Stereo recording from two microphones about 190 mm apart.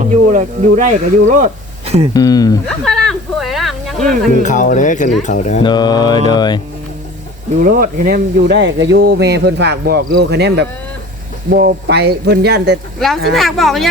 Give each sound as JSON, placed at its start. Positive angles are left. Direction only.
{"t": 0.0, "sound": "speech", "side_deg": -40}
{"t": 2.1, "sound": "mantra", "side_deg": 20}
{"t": 2.6, "sound": "a sound", "side_deg": 0}
{"t": 4.4, "sound": "speech", "side_deg": 40}
{"t": 5.6, "sound": "mantra", "side_deg": 20}
{"t": 7.6, "sound": "speech", "side_deg": -45}
{"t": 13.3, "sound": "speech", "side_deg": 0}